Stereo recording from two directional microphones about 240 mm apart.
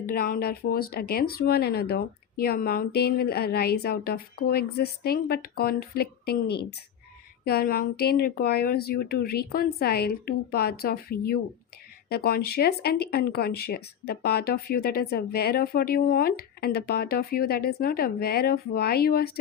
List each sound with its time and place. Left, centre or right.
0.0 s speech: left